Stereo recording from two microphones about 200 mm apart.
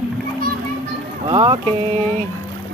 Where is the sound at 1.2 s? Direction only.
20° right (ahead or behind).